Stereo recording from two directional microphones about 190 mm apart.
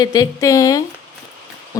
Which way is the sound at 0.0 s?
20° left (ahead or behind).